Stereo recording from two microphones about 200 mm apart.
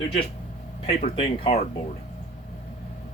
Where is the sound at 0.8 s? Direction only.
30° left (ahead or behind).